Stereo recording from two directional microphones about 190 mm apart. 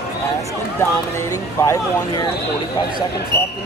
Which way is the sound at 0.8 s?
15° left (ahead or behind).